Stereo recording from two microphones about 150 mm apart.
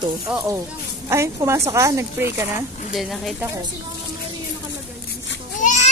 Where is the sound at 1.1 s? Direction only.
20° right (ahead or behind).